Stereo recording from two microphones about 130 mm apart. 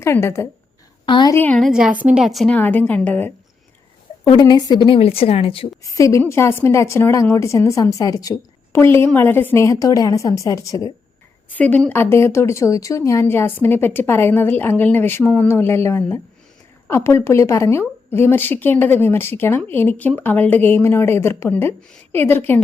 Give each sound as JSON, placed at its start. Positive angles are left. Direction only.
{"t": 0.0, "sound": "a woman's voice", "side_deg": 20}
{"t": 1.0, "sound": "a woman's voice", "side_deg": 40}
{"t": 1.3, "sound": "a woman's voice", "side_deg": 15}
{"t": 1.6, "sound": "a woman's voice", "side_deg": -5}
{"t": 2.6, "sound": "a woman's voice", "side_deg": 15}
{"t": 4.2, "sound": "a woman's voice", "side_deg": 30}
{"t": 4.9, "sound": "speech", "side_deg": 45}
{"t": 5.9, "sound": "a woman's voice", "side_deg": 25}
{"t": 11.4, "sound": "a woman's voice", "side_deg": 10}